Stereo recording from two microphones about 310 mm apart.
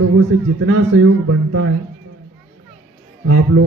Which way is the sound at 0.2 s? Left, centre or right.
Right.